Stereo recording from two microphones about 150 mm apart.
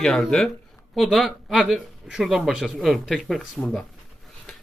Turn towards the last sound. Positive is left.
turn(degrees=5)  # may be behind; listen again after turning